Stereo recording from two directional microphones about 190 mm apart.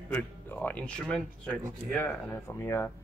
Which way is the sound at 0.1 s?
10° left (ahead or behind).